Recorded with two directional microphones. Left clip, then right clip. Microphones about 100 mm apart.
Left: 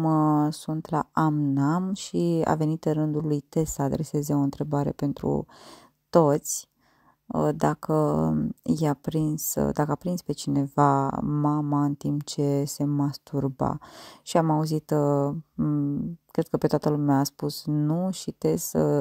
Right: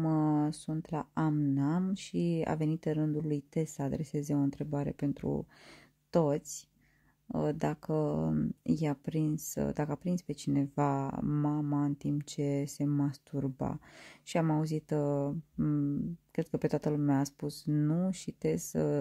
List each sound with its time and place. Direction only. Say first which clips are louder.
0.0 s a sound: left 8 dB; 15° left (ahead or behind)
0.8 s speech: left 10 dB; 60° left (ahead or behind)
11.2 s speech: left 7 dB; 15° left (ahead or behind)
12.0 s speech: left 7 dB; 50° left (ahead or behind)
15.5 s speech: left 2 dB; 10° left (ahead or behind)
16.3 s speech: left 8 dB; 45° left (ahead or behind)